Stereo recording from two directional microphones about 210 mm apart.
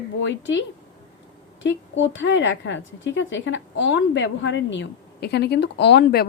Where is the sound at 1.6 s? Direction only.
60° left (ahead or behind).